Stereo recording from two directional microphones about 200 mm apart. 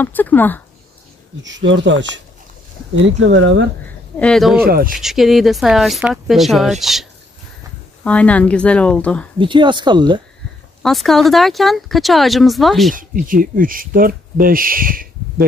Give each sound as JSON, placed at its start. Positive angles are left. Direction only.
{"t": 0.0, "sound": "speech", "side_deg": 10}
{"t": 1.4, "sound": "speech", "side_deg": -65}
{"t": 4.2, "sound": "speech", "side_deg": 0}
{"t": 4.6, "sound": "speech", "side_deg": -50}
{"t": 4.9, "sound": "speech", "side_deg": 0}
{"t": 9.4, "sound": "speech", "side_deg": -25}
{"t": 10.8, "sound": "speech", "side_deg": 0}
{"t": 12.9, "sound": "speech", "side_deg": -45}